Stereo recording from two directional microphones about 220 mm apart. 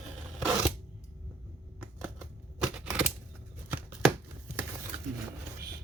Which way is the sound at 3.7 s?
5° right (ahead or behind).